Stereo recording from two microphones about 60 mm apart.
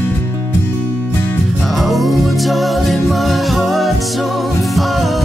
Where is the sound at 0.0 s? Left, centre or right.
Left.